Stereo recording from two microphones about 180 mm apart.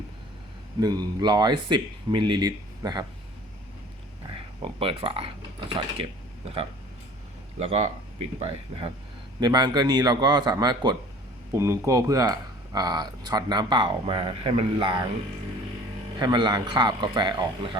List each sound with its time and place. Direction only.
0.8 s speech: 20° right (ahead or behind)
4.6 s speech: 30° right (ahead or behind)
16.1 s speech: 25° right (ahead or behind)